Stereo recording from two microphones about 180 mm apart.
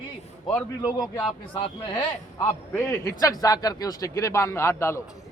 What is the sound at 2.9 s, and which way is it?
A man's voice, 15° left (ahead or behind).